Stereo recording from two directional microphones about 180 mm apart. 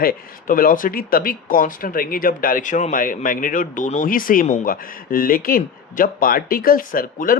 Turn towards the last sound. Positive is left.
turn(degrees=50)  # may be behind; listen again after turning